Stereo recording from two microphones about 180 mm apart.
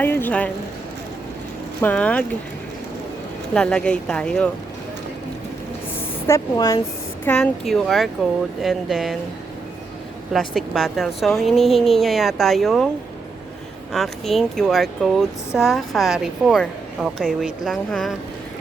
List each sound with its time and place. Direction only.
0.0 s speech: 10° left (ahead or behind)
1.8 s speech: 10° left (ahead or behind)
3.5 s speech: 5° left (ahead or behind)
6.2 s speech: 15° left (ahead or behind)
7.3 s speech: 5° left (ahead or behind)
10.3 s speech: centre (ahead or behind)
13.9 s speech: centre (ahead or behind)